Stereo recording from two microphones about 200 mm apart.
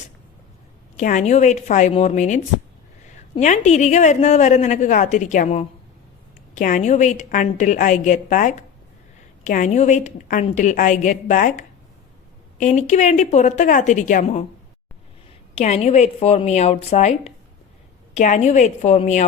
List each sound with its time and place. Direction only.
0.9 s a woman's voice: 35° left (ahead or behind)
15.5 s a woman's voice: 35° left (ahead or behind)